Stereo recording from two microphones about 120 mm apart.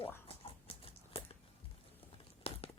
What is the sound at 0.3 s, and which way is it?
Clip-clop, 50° left (ahead or behind).